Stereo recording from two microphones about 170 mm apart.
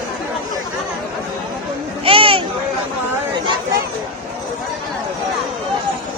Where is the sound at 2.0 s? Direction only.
30° right (ahead or behind).